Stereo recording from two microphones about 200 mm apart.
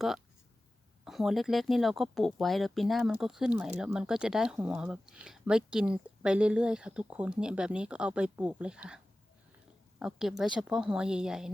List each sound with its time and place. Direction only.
1.0 s speech: centre (ahead or behind)
10.0 s speech: centre (ahead or behind)